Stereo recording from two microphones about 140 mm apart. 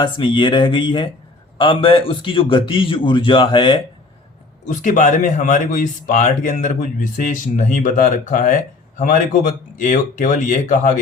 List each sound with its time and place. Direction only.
0.0 s a man's voice: 35° left (ahead or behind)
4.7 s a man's voice: 65° left (ahead or behind)